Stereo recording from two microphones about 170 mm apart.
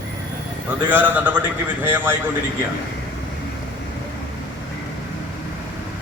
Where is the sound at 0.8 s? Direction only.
10° right (ahead or behind).